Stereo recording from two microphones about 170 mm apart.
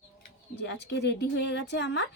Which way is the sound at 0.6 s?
90° left.